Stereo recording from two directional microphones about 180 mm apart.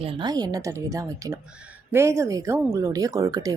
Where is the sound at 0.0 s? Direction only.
30° right (ahead or behind).